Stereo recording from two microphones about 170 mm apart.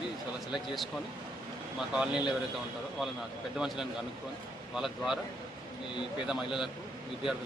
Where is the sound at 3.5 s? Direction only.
Centre (ahead or behind).